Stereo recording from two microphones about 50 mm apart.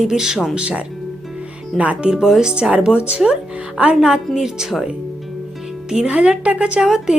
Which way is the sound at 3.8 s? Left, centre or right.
Right.